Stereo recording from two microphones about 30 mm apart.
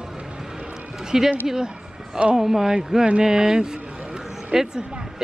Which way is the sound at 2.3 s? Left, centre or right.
Centre.